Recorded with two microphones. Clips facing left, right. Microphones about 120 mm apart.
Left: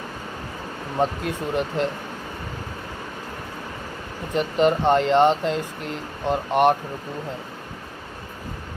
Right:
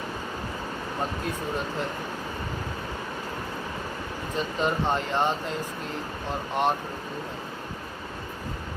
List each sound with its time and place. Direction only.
1.2 s speech: 75° left (ahead or behind)
4.4 s speech: 70° left (ahead or behind)